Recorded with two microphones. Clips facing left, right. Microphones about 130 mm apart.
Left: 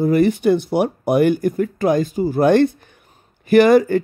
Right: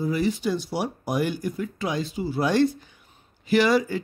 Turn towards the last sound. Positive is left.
turn(degrees=55)  # may be behind; listen again after turning